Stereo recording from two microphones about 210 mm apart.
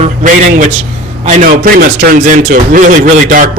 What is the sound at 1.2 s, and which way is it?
Music, 35° right (ahead or behind).